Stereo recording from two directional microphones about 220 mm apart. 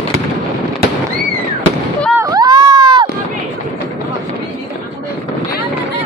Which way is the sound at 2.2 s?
15° right (ahead or behind).